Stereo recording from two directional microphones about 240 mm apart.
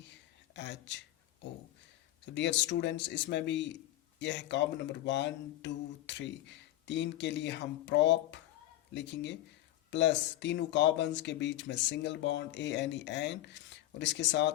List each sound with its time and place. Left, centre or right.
0.5 s speech: left
2.2 s speech: left